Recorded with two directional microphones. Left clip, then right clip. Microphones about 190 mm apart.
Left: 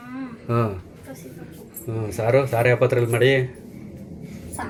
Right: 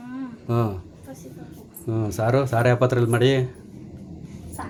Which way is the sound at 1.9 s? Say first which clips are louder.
Left 2 dB; 30° right (ahead or behind).